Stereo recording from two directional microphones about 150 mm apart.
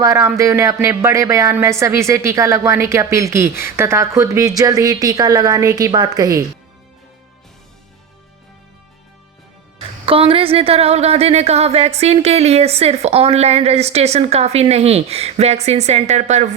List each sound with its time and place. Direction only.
0.0 s a woman's voice: 20° right (ahead or behind)
10.1 s a woman's voice: 35° right (ahead or behind)